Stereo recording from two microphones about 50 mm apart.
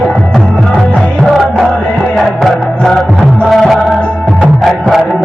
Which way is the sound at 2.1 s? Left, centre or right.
Centre.